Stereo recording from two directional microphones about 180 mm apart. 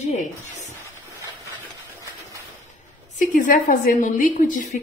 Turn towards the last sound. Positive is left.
turn(degrees=45)  # may be behind; listen again after turning